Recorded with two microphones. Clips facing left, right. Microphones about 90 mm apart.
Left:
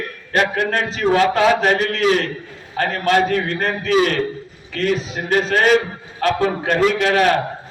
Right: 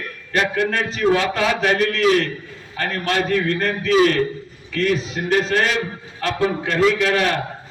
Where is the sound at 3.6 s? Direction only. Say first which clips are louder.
Even; 35° left (ahead or behind).